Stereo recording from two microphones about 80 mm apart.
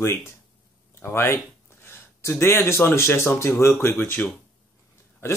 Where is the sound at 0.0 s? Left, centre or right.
Left.